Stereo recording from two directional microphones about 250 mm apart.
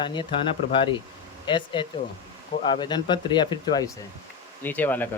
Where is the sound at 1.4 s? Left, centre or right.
Centre.